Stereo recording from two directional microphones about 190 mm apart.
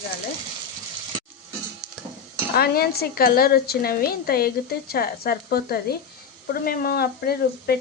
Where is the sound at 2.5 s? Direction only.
55° left (ahead or behind).